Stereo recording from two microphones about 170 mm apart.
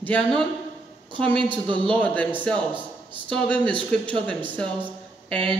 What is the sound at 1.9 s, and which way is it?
Speech, 10° left (ahead or behind).